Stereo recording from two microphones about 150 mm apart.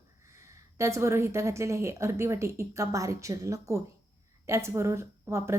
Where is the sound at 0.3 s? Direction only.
20° right (ahead or behind).